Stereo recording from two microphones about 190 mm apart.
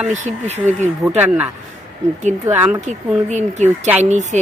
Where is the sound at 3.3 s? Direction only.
35° right (ahead or behind).